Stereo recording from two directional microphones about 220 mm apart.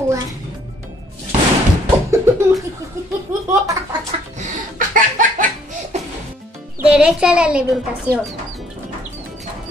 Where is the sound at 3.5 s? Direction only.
15° right (ahead or behind).